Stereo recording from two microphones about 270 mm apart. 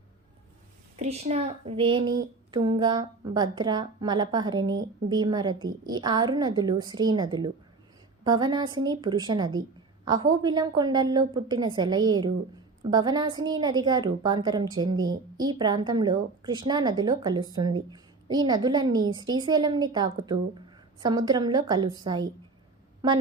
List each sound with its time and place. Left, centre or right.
0.9 s a woman's voice: right